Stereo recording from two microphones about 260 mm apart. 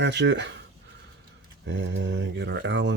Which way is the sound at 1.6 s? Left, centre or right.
Right.